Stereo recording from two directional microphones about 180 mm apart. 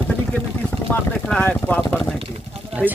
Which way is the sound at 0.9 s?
10° left (ahead or behind).